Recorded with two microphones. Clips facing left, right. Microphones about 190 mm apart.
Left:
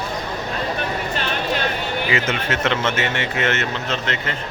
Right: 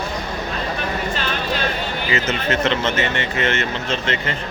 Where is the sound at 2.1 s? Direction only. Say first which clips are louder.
Right 3 dB; 10° left (ahead or behind).